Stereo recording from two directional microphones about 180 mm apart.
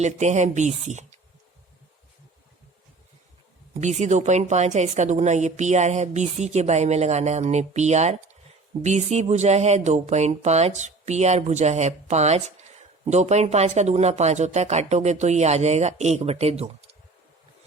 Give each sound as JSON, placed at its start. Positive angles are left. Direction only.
{"t": 0.0, "sound": "speech", "side_deg": -40}
{"t": 3.8, "sound": "speech", "side_deg": -40}